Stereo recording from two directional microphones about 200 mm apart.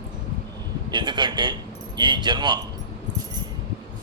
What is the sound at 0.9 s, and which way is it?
Speech, 20° right (ahead or behind).